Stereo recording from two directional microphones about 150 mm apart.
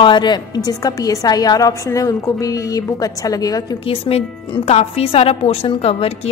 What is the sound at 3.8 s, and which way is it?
A woman's voice, 35° left (ahead or behind).